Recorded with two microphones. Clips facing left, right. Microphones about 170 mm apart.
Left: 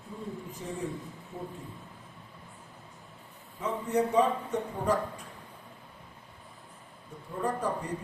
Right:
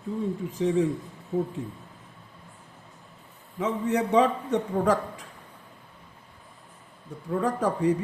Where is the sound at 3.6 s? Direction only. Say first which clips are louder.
Right 3 dB; 90° right.